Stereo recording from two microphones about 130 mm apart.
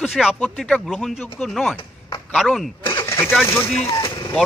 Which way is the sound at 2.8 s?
20° left (ahead or behind).